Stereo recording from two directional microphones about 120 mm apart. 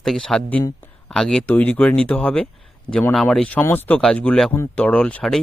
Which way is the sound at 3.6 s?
15° left (ahead or behind).